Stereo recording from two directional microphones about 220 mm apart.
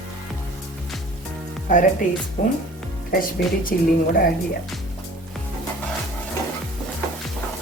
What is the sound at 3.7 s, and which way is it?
Speech, 40° left (ahead or behind).